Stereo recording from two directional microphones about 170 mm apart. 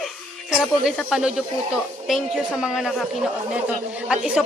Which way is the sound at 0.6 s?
Centre (ahead or behind).